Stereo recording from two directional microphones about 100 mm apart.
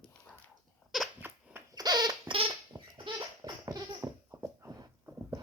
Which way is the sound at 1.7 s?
45° right (ahead or behind).